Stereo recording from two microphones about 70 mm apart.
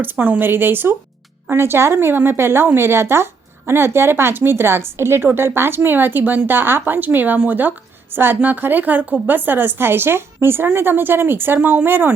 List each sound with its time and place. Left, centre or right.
0.0 s a woman's voice: right